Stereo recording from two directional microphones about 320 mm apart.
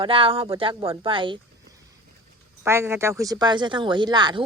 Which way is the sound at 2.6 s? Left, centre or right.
Centre.